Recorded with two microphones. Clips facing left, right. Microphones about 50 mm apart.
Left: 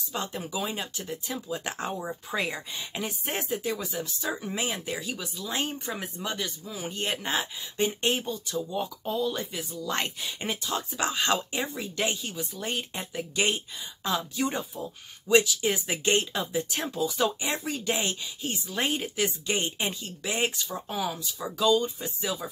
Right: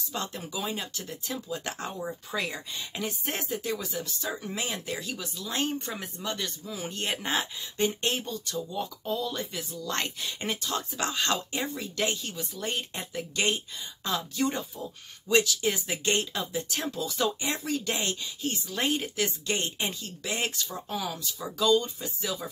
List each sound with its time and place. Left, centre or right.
0.1 s speech: centre
7.7 s speech: centre